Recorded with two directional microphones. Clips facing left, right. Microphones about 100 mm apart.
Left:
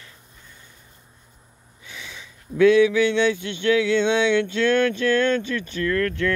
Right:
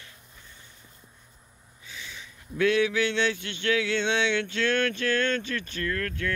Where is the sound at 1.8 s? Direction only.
90° left.